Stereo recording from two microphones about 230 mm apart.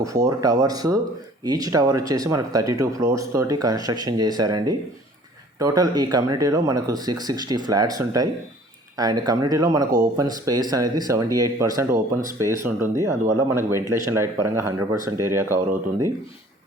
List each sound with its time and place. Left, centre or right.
0.0 s speech: centre